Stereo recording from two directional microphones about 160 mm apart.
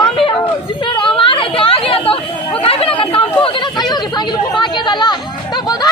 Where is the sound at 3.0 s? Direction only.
35° left (ahead or behind).